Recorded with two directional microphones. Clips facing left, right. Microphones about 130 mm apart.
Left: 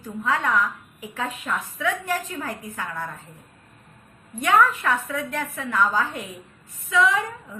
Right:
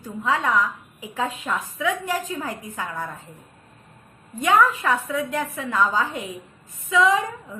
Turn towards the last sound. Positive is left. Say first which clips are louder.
# right 2 dB
turn(degrees=-20)  # may be behind; listen again after turning